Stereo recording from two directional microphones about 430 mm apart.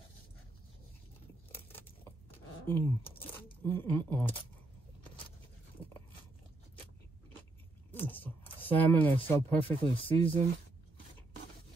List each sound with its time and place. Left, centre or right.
1.5 s a sound: centre
2.6 s speech: centre
7.9 s speech: centre